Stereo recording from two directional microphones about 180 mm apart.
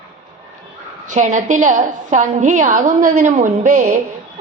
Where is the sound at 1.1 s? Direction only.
45° right (ahead or behind).